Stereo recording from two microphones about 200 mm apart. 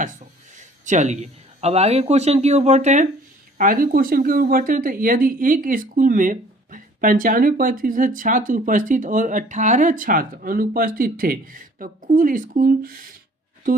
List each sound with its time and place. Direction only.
0.0 s speech: 40° right (ahead or behind)